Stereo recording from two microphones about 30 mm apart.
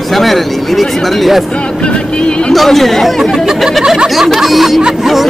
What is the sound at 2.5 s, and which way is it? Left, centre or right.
A man's voice, centre.